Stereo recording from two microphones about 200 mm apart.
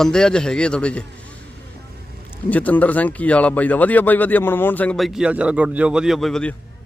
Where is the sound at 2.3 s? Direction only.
10° left (ahead or behind).